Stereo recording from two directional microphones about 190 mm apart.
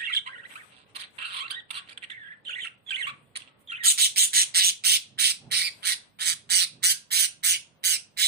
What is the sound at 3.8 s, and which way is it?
Squawk, 55° right (ahead or behind).